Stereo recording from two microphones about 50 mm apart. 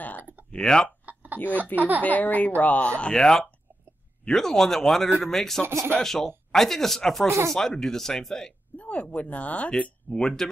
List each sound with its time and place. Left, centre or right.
0.2 s a sound: right
0.5 s speech: centre
1.0 s a sound: right
1.8 s speech: right
2.0 s speech: left; by 5.6 s centre
5.7 s speech: right
5.9 s speech: centre
7.2 s speech: right
7.5 s speech: centre
8.7 s speech: left